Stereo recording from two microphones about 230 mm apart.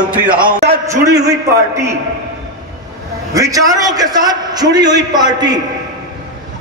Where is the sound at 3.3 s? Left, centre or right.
Centre.